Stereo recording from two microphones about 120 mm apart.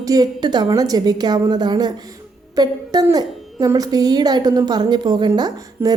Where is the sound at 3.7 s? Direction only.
30° right (ahead or behind).